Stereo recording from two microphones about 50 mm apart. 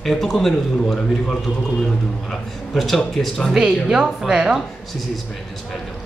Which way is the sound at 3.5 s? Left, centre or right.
Centre.